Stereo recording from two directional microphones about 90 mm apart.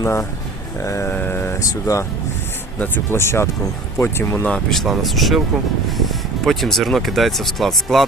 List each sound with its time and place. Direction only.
0.0 s speech: 30° left (ahead or behind)
1.1 s a sound: 25° left (ahead or behind)
1.5 s speech: 35° left (ahead or behind)
2.7 s speech: 20° left (ahead or behind)
4.4 s speech: 5° left (ahead or behind)